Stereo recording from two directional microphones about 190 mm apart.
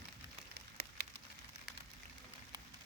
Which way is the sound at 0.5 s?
55° right (ahead or behind).